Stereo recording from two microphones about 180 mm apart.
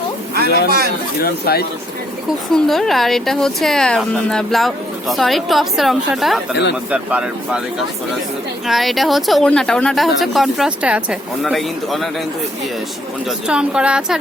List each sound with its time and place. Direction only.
0.4 s speech: 65° left (ahead or behind)
2.5 s a woman's voice: centre (ahead or behind)
8.6 s a woman's voice: centre (ahead or behind)
13.5 s a woman's voice: 5° right (ahead or behind)